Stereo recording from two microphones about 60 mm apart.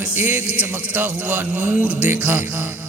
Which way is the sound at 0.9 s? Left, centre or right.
Right.